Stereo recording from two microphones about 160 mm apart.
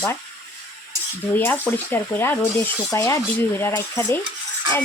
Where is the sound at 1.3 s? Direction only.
10° left (ahead or behind).